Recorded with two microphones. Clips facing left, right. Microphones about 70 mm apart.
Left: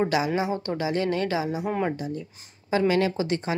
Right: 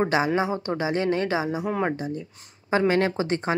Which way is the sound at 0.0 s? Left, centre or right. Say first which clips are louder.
Right 2 dB; right.